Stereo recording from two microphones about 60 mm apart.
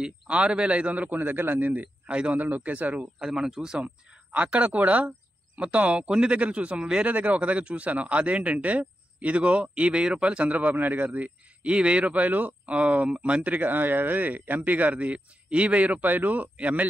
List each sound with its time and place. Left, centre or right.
0.0 s speech: centre
2.3 s speech: right
3.2 s speech: centre
3.8 s speech: right